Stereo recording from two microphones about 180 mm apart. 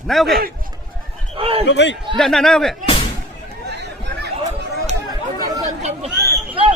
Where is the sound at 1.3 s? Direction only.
30° right (ahead or behind).